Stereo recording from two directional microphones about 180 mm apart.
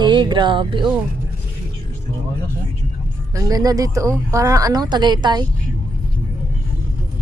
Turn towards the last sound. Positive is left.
turn(degrees=-25)  # may be behind; listen again after turning